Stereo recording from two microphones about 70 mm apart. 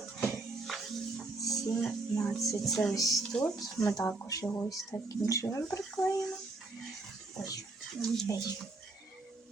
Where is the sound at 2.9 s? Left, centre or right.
Left.